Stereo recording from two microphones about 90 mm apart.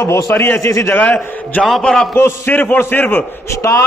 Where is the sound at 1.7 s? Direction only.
5° left (ahead or behind).